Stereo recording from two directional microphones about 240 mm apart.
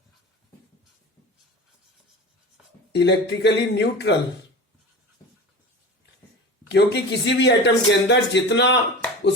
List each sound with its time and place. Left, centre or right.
2.9 s a man's voice: left
6.7 s a man's voice: left